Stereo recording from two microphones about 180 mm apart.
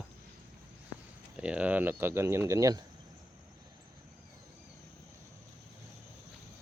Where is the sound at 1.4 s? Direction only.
5° right (ahead or behind).